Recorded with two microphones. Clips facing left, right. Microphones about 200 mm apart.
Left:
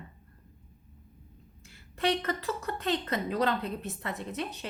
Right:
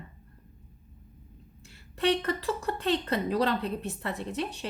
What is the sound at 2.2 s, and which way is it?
A woman's voice, 30° right (ahead or behind).